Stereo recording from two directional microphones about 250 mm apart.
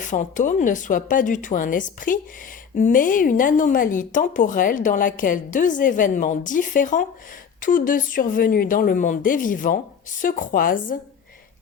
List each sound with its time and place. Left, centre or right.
0.0 s speech: left